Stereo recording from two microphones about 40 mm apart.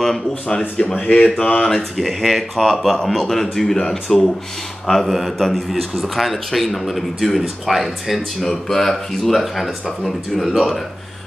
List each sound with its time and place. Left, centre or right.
0.3 s speech: left
0.9 s speech: left
1.6 s a man's voice: centre
8.4 s speech: centre
9.4 s a man's voice: centre